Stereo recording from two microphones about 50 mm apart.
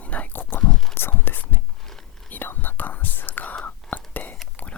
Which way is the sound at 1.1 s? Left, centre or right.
Left.